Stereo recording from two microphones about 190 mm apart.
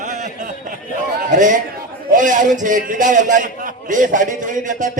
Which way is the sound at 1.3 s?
40° right (ahead or behind).